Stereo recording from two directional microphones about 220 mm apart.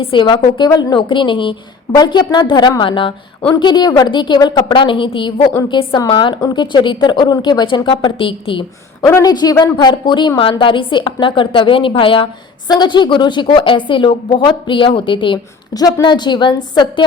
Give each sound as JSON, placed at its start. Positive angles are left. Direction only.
{"t": 0.0, "sound": "a woman's voice", "side_deg": 20}